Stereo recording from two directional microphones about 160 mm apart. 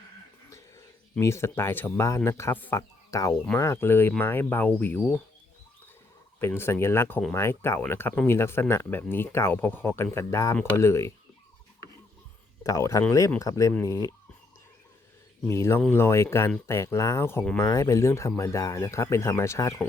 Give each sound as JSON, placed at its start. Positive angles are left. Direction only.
{"t": 1.2, "sound": "speech", "side_deg": 15}
{"t": 6.4, "sound": "speech", "side_deg": 15}
{"t": 12.6, "sound": "speech", "side_deg": 20}
{"t": 15.4, "sound": "speech", "side_deg": 15}